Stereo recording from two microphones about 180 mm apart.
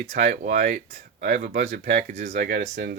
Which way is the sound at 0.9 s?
60° right (ahead or behind).